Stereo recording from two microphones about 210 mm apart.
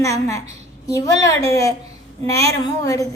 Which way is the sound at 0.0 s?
15° left (ahead or behind).